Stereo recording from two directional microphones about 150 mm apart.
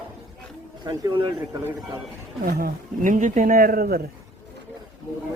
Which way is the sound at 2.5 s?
85° right.